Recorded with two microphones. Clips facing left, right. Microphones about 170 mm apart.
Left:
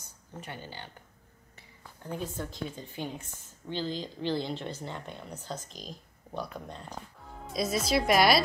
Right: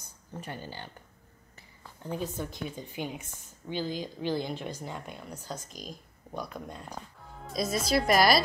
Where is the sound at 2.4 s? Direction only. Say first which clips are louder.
Right 1 dB; 15° right (ahead or behind).